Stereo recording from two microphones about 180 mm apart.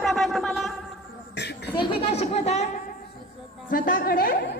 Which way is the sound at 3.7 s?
50° left (ahead or behind).